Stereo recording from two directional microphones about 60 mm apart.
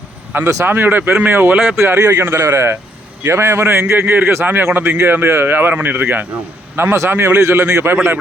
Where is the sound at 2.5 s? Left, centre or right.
Right.